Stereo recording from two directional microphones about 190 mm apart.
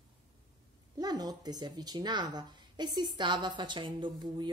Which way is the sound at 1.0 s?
20° right (ahead or behind).